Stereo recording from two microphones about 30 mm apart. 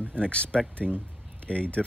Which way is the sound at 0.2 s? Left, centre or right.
Left.